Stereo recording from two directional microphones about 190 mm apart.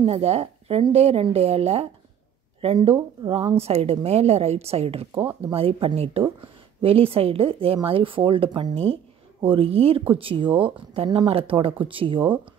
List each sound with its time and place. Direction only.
0.0 s a woman's voice: 35° right (ahead or behind)